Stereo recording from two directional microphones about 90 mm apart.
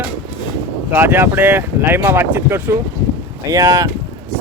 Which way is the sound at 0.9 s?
25° right (ahead or behind).